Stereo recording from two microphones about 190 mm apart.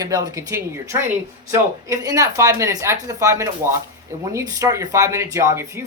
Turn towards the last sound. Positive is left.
turn(degrees=-15)  # may be behind; listen again after turning